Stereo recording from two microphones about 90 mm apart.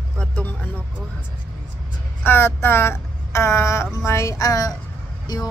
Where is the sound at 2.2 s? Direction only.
25° left (ahead or behind).